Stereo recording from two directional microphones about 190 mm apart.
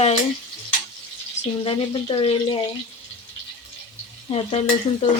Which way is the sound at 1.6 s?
30° left (ahead or behind).